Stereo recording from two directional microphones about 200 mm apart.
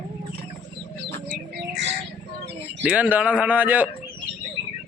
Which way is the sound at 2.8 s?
5° right (ahead or behind).